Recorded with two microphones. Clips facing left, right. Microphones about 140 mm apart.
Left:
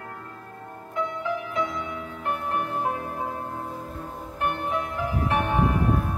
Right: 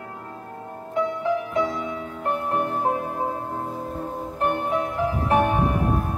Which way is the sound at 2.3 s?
25° right (ahead or behind).